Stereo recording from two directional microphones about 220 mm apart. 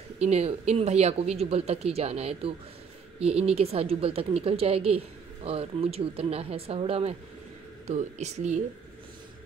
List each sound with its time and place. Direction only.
0.2 s a woman's voice: 30° right (ahead or behind)